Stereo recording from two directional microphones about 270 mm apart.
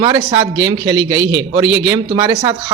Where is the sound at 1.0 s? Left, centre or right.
Right.